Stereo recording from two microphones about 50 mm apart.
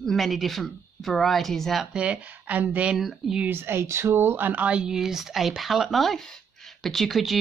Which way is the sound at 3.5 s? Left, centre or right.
Right.